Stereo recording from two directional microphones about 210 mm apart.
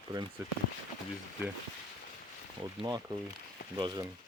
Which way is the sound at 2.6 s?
20° right (ahead or behind).